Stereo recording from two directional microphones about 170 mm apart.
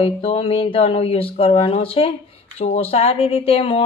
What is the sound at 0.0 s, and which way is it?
Speech, 35° left (ahead or behind).